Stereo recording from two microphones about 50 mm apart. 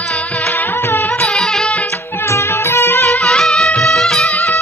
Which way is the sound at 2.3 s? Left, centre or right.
Left.